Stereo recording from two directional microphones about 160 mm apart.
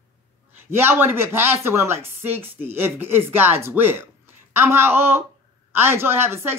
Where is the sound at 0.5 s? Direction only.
15° right (ahead or behind).